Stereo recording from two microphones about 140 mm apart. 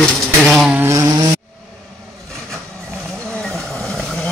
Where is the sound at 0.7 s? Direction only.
20° right (ahead or behind).